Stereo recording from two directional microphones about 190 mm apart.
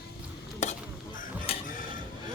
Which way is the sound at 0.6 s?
35° left (ahead or behind).